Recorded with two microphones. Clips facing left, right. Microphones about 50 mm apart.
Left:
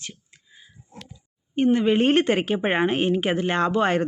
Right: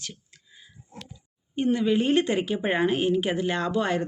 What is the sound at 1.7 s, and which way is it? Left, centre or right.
Speech, left.